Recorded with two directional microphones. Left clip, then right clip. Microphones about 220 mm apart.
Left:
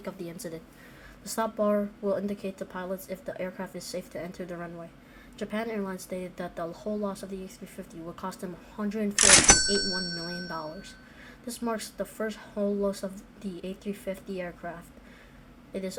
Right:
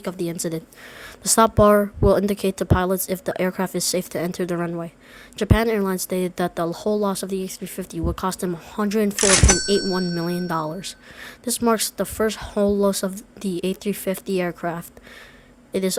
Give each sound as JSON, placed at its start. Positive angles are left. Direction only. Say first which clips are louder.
{"t": 0.0, "sound": "speech", "louder": "right 11 dB", "side_deg": -35}
{"t": 9.1, "sound": "speech", "louder": "left 1 dB", "side_deg": 0}
{"t": 10.2, "sound": "a woman's voice", "louder": "right 11 dB", "side_deg": -40}